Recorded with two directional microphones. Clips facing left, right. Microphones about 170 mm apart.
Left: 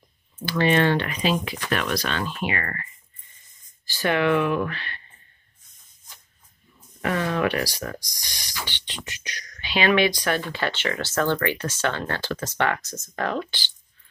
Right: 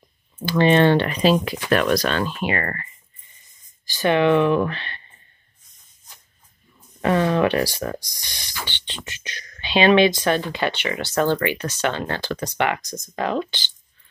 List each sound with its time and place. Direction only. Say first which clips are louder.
0.5 s speech: right 5 dB; 25° right (ahead or behind)
3.8 s speech: right 4 dB; 20° right (ahead or behind)
7.0 s speech: right 5 dB; 30° right (ahead or behind)